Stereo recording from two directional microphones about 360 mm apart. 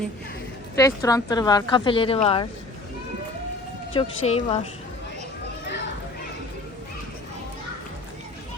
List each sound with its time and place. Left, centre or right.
0.8 s speech: centre
3.9 s speech: centre